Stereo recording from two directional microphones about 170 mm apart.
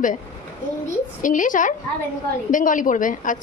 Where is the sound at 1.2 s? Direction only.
50° left (ahead or behind).